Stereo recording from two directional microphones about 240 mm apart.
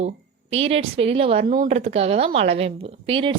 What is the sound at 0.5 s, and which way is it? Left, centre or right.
A woman's voice, right.